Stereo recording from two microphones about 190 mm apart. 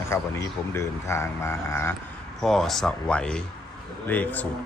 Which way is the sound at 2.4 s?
Centre (ahead or behind).